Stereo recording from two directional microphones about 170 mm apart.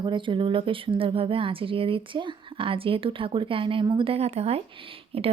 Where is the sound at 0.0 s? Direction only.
30° right (ahead or behind).